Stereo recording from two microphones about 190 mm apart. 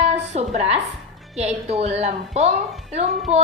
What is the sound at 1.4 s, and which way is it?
A woman's voice, 35° right (ahead or behind).